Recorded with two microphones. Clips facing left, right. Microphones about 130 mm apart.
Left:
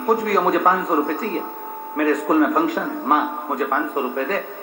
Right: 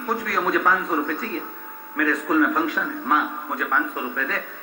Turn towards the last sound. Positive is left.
turn(degrees=40)  # may be behind; listen again after turning